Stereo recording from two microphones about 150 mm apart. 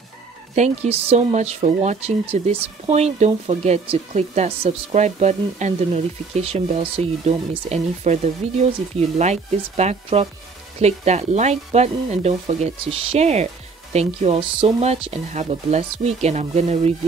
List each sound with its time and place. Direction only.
0.6 s speech: 45° right (ahead or behind)